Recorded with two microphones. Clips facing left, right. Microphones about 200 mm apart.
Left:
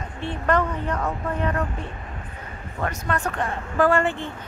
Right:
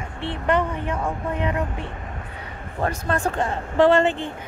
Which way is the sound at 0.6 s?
10° right (ahead or behind).